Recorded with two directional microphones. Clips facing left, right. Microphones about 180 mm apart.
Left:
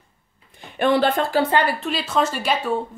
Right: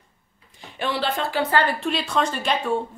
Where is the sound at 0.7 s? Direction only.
50° left (ahead or behind).